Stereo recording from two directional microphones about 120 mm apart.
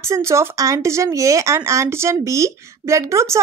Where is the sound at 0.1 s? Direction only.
25° right (ahead or behind).